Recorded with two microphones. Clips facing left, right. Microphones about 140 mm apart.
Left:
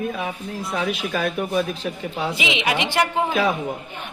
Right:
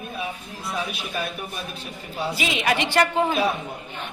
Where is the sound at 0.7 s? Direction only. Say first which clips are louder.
Left 5 dB; 80° left.